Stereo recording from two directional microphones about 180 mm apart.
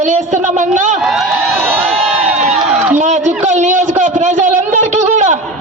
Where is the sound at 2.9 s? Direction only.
40° right (ahead or behind).